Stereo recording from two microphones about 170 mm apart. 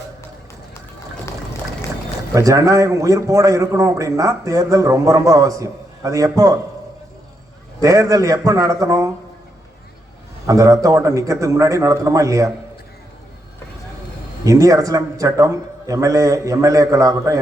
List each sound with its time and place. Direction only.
2.3 s a man's voice: 20° right (ahead or behind)
7.8 s a man's voice: 20° right (ahead or behind)
10.4 s a man's voice: 20° right (ahead or behind)
14.4 s a man's voice: 20° right (ahead or behind)